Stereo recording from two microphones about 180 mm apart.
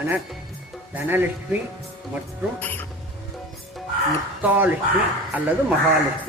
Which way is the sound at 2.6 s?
10° left (ahead or behind).